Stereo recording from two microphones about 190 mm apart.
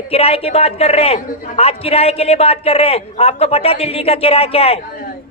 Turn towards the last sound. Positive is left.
turn(degrees=30)  # may be behind; listen again after turning